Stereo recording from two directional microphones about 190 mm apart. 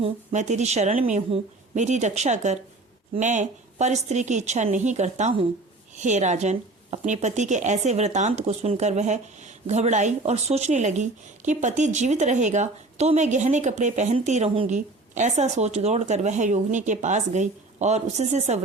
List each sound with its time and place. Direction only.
0.0 s speech: 40° right (ahead or behind)